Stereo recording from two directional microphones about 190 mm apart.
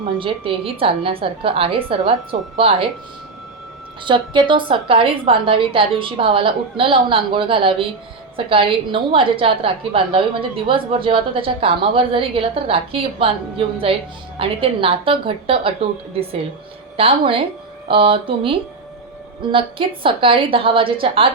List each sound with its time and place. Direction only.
0.2 s a woman's voice: 25° right (ahead or behind)
4.0 s a woman's voice: 25° right (ahead or behind)
17.0 s a woman's voice: 30° right (ahead or behind)